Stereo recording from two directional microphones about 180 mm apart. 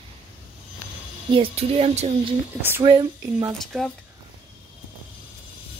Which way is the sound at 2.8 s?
25° right (ahead or behind).